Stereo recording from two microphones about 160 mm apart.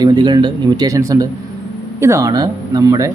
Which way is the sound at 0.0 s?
25° right (ahead or behind).